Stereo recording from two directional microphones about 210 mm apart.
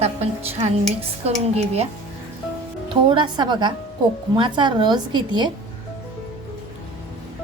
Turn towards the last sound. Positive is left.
turn(degrees=-20)  # may be behind; listen again after turning